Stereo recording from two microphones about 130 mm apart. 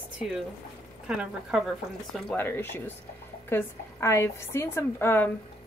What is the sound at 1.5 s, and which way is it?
Speech, 5° right (ahead or behind).